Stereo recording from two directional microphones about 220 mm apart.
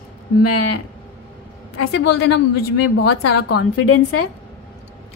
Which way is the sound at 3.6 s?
85° left.